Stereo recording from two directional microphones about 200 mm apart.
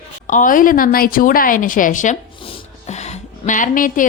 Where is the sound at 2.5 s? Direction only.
35° left (ahead or behind).